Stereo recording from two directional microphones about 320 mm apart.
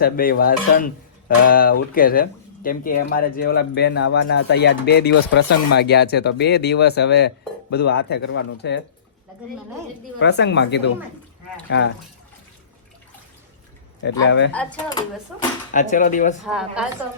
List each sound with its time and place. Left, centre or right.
0.0 s dishes: left
2.6 s speech: left
10.2 s speech: left
14.0 s speech: left
14.5 s a woman's voice: centre
15.7 s dishes: left
16.4 s a woman's voice: centre